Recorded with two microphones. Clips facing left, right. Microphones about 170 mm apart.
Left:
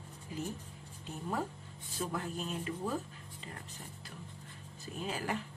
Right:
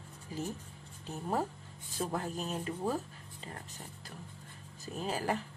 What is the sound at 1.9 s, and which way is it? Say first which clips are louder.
Speech: right 2 dB; 40° right (ahead or behind).